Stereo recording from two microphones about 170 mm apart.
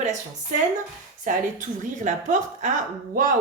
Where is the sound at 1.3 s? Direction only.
50° right (ahead or behind).